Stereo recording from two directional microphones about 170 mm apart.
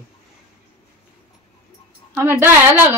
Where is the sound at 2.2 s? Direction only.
15° right (ahead or behind).